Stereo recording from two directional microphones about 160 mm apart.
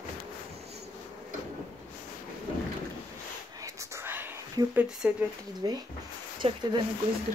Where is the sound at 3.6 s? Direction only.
20° right (ahead or behind).